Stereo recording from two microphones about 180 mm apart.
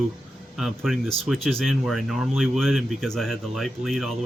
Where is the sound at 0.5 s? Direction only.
Centre (ahead or behind).